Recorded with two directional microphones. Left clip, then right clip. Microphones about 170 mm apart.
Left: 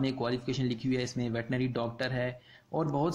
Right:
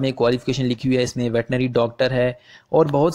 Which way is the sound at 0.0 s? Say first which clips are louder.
Right 13 dB; 45° right (ahead or behind).